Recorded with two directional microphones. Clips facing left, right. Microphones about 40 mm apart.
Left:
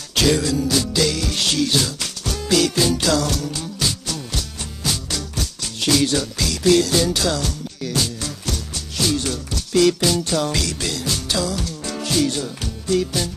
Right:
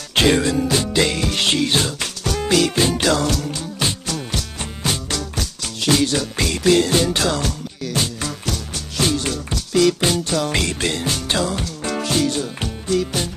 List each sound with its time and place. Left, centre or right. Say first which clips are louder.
0.1 s music: right 2 dB; right